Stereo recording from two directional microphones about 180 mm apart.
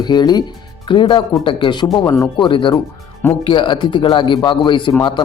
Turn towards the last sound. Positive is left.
turn(degrees=25)  # may be behind; listen again after turning